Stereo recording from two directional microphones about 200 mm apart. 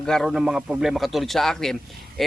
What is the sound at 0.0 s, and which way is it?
Speech, centre (ahead or behind).